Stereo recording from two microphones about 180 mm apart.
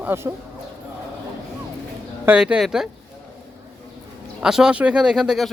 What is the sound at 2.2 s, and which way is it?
Speech, 5° right (ahead or behind).